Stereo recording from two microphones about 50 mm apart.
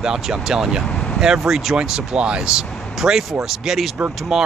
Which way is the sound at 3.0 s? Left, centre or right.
Centre.